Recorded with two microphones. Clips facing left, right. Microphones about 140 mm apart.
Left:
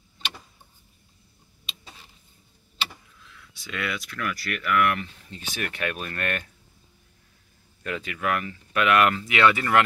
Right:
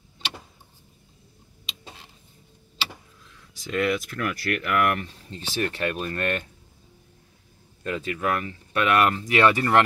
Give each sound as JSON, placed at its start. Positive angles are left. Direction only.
{"t": 3.5, "sound": "speech", "side_deg": -45}
{"t": 7.8, "sound": "speech", "side_deg": -30}